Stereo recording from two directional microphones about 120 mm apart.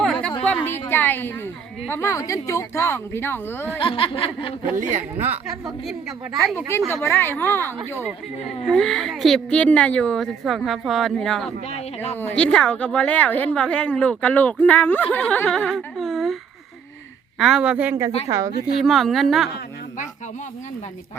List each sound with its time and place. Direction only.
0.0 s a sound: 5° left (ahead or behind)
1.9 s speech: 25° left (ahead or behind)
3.8 s a sound: 50° left (ahead or behind)
4.8 s speech: 85° right
5.8 s speech: centre (ahead or behind)
7.0 s a woman's voice: 20° left (ahead or behind)
8.6 s a woman's voice: 5° left (ahead or behind); by 18.5 s 30° right (ahead or behind)
18.8 s speech: centre (ahead or behind)